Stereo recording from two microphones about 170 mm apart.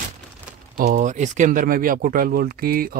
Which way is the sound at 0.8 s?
50° right (ahead or behind).